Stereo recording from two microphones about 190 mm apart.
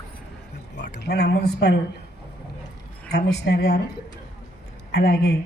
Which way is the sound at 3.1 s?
60° left (ahead or behind).